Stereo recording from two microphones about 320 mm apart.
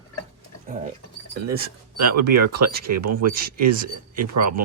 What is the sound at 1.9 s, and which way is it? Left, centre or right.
Speech, right.